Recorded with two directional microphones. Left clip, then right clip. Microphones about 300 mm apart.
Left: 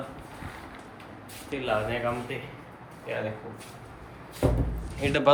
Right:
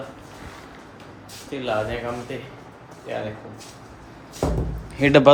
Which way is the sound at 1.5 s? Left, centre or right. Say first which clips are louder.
Right 3 dB; centre.